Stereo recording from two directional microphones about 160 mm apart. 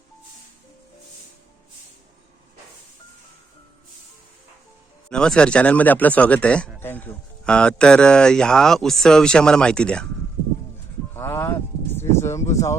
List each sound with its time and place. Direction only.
5.0 s speech: 5° left (ahead or behind)
11.1 s speech: 15° left (ahead or behind)